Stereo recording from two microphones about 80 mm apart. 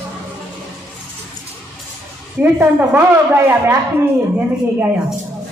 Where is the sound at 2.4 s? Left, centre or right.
Right.